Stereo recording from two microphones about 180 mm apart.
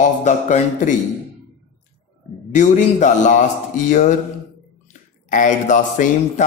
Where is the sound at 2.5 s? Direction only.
45° left (ahead or behind).